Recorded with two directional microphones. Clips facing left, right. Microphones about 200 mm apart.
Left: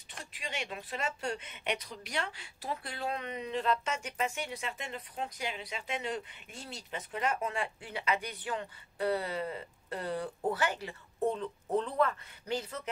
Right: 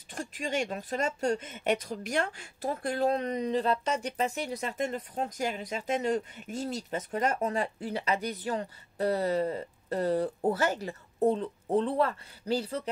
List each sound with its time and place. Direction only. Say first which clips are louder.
0.1 s speech: right 9 dB; 45° right (ahead or behind)